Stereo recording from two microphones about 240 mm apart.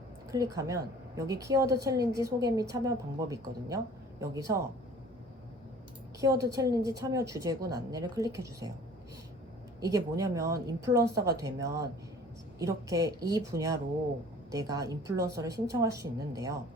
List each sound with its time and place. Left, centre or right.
0.3 s a woman's voice: centre
6.1 s a woman's voice: centre
9.8 s a woman's voice: centre